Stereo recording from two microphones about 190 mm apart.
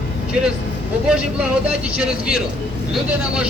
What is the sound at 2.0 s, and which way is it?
Speech, 5° right (ahead or behind).